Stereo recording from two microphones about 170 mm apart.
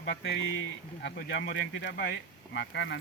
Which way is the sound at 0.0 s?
80° left.